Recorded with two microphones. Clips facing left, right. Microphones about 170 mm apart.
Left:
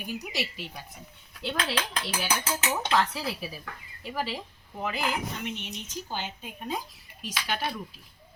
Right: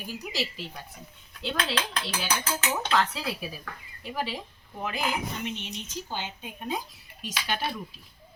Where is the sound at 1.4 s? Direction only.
10° left (ahead or behind).